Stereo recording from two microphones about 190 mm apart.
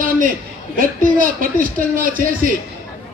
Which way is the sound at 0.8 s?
45° right (ahead or behind).